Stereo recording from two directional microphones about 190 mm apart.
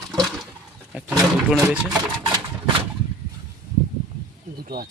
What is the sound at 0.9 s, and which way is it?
Roaring cats, 5° right (ahead or behind).